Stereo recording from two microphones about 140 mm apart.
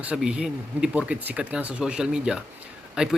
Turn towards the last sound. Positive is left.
turn(degrees=-5)  # may be behind; listen again after turning